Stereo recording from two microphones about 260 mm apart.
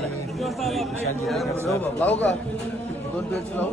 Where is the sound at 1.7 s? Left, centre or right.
Centre.